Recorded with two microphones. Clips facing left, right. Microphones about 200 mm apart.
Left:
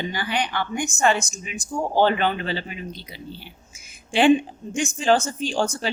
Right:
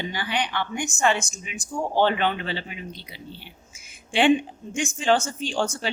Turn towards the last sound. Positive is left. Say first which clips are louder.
# left 2 dB
turn(degrees=40)  # may be behind; listen again after turning